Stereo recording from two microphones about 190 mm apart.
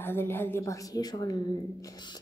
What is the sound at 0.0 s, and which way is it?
A woman's voice, 10° left (ahead or behind).